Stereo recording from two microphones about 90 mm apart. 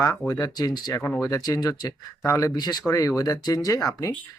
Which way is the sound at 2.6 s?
50° left (ahead or behind).